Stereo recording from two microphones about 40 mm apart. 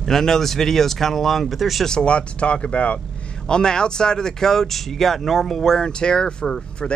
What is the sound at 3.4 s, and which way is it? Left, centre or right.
Speech, centre.